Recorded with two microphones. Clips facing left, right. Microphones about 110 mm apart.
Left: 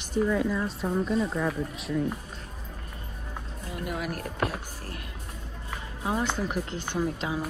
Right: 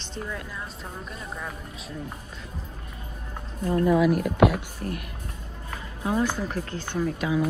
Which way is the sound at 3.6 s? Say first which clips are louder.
Right 13 dB; 70° right (ahead or behind).